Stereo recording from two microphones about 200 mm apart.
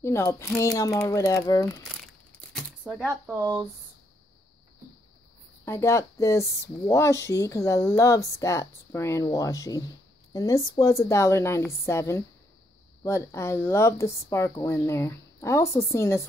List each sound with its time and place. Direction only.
0.0 s speech: 15° left (ahead or behind)
2.5 s shuffling cards: 5° right (ahead or behind)
3.1 s speech: 15° right (ahead or behind)
5.7 s speech: 15° left (ahead or behind)